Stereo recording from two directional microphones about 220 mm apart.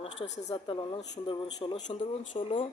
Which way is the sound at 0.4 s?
20° left (ahead or behind).